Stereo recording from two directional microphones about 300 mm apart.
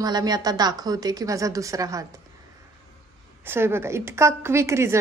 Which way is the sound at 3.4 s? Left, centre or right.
Centre.